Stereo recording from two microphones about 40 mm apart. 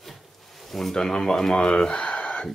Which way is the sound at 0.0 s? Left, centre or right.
Centre.